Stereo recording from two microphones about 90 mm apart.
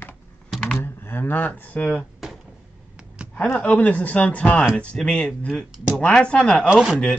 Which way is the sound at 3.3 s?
20° left (ahead or behind).